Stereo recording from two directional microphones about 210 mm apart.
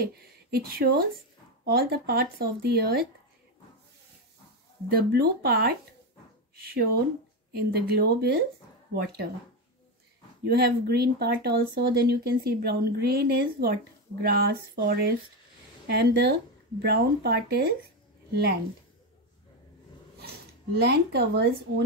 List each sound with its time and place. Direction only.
0.0 s speech: 45° right (ahead or behind)
4.9 s speech: 45° right (ahead or behind)
7.5 s speech: 50° right (ahead or behind)
10.4 s speech: 50° right (ahead or behind)
20.7 s speech: 50° right (ahead or behind)